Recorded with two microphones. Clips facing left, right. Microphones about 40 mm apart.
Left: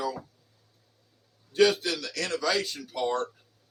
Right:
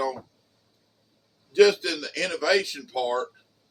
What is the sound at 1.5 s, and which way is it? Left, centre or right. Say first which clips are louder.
Speech: right 4 dB; right.